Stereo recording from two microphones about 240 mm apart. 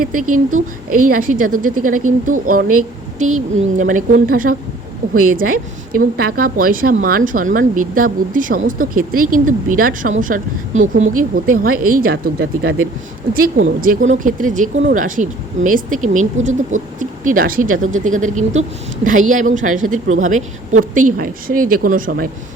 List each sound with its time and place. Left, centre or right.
0.9 s speech: right